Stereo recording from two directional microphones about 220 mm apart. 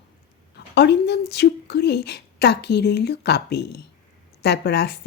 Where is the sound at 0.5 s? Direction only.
50° left (ahead or behind).